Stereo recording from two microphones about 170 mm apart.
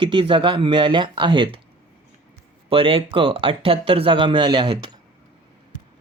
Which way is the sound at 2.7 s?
30° right (ahead or behind).